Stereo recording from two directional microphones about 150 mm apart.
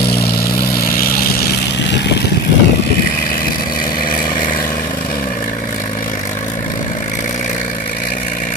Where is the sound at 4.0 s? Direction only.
75° left (ahead or behind).